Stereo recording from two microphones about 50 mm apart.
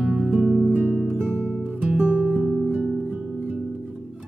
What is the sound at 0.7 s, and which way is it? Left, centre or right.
Music, right.